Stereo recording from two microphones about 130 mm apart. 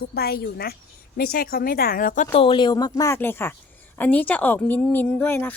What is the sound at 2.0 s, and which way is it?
Speech, 90° left.